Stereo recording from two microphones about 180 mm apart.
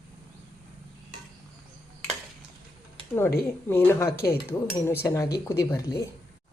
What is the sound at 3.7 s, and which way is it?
Speech, 15° left (ahead or behind).